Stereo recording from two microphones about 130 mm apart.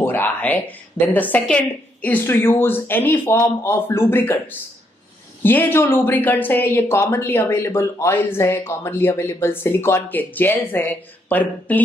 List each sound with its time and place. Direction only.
0.0 s speech: 15° left (ahead or behind)